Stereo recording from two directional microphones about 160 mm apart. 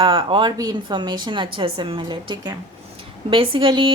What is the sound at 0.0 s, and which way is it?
A woman's voice, 35° right (ahead or behind).